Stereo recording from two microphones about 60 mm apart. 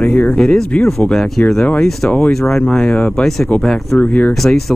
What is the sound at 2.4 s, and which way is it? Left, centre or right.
Speech, centre.